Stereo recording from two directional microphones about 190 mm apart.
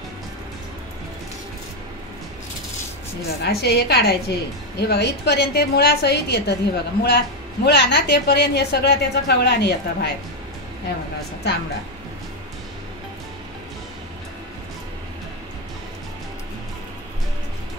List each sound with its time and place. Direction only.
3.4 s a woman's voice: 60° left (ahead or behind)